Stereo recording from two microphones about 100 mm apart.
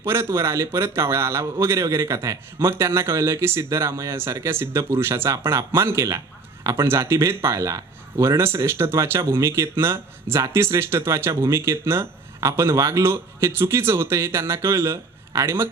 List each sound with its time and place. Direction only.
0.0 s speech: 25° right (ahead or behind)